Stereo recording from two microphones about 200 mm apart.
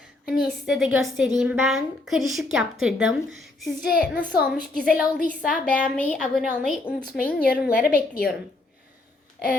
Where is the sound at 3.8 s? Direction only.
45° left (ahead or behind).